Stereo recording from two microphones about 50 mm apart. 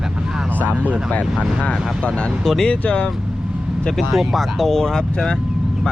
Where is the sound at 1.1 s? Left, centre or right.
Left.